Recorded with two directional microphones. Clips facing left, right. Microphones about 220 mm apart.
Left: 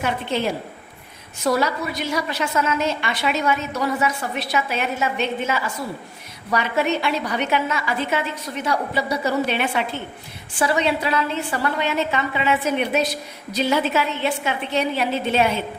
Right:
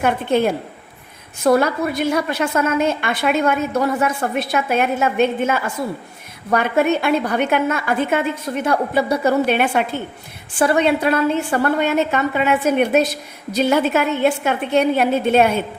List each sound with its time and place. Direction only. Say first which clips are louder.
0.0 s a woman's voice: right 6 dB; 55° right (ahead or behind)